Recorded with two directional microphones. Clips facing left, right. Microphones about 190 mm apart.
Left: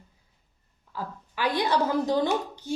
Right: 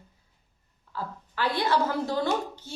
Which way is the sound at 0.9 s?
15° left (ahead or behind).